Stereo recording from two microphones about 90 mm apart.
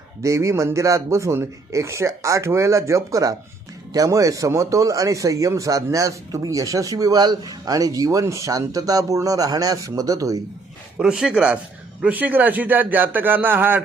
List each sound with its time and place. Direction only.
0.2 s a man's voice: 35° right (ahead or behind)
10.9 s a man's voice: 10° right (ahead or behind)